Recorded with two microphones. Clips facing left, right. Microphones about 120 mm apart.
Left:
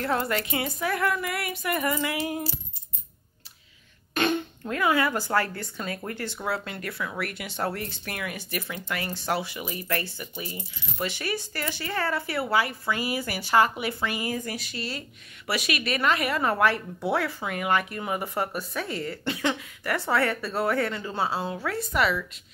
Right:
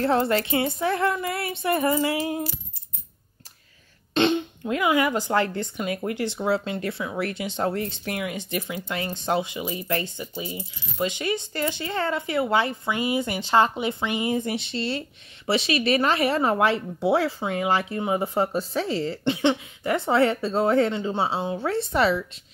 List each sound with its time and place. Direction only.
0.0 s speech: 30° right (ahead or behind)
4.1 s speech: 25° right (ahead or behind)